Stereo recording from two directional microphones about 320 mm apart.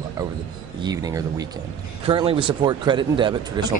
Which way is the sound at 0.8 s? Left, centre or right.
Centre.